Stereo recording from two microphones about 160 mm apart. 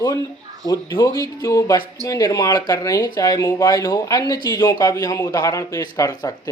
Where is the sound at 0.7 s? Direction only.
25° left (ahead or behind).